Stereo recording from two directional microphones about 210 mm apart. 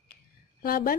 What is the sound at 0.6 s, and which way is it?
Speech, 45° left (ahead or behind).